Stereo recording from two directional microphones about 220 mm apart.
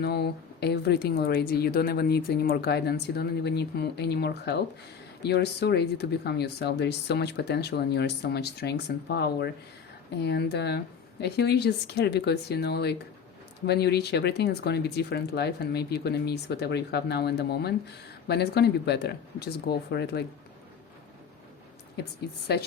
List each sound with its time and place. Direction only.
0.0 s speech: 45° left (ahead or behind)